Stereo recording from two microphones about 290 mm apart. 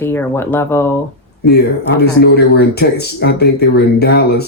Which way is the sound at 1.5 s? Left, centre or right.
Left.